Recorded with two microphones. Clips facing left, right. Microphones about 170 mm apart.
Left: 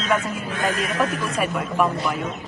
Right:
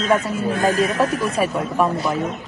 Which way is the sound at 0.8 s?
30° right (ahead or behind).